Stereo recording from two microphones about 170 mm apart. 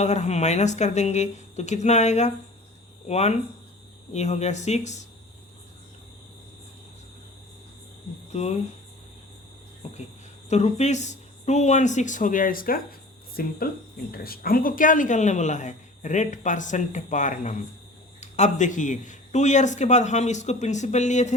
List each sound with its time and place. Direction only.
0.0 s speech: 40° left (ahead or behind)
8.3 s speech: 40° left (ahead or behind)
10.5 s speech: 40° left (ahead or behind)